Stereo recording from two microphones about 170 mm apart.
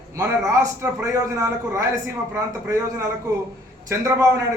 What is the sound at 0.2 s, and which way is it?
A man's voice, 20° right (ahead or behind).